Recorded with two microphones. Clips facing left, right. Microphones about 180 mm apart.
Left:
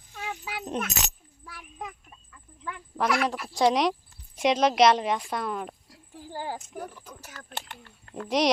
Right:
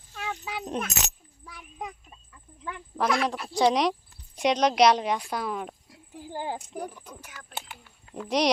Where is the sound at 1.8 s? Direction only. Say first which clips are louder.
Right 2 dB; 20° right (ahead or behind).